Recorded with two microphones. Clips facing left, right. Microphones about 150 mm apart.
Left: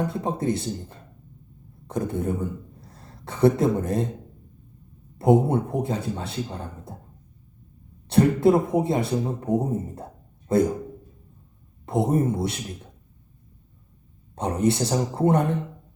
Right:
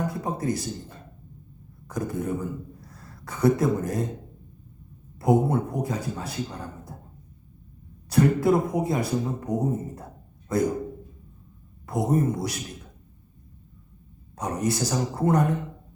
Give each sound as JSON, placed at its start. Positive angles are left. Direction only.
{"t": 0.1, "sound": "a man's voice", "side_deg": 25}
{"t": 1.9, "sound": "speech", "side_deg": 25}
{"t": 5.2, "sound": "a man's voice", "side_deg": 25}
{"t": 8.1, "sound": "a man's voice", "side_deg": 25}
{"t": 11.9, "sound": "a man's voice", "side_deg": 25}
{"t": 14.3, "sound": "a man's voice", "side_deg": 25}